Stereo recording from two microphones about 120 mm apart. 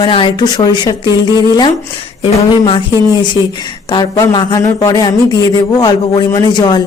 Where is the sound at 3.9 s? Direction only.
35° left (ahead or behind).